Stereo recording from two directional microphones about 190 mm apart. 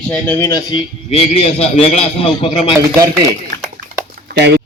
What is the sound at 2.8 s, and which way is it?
Speech, 15° right (ahead or behind).